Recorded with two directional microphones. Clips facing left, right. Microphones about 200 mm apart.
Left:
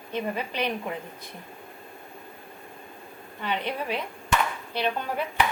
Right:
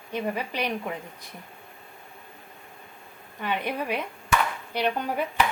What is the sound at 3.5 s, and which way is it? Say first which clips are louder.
A woman's voice: right 1 dB; 15° right (ahead or behind).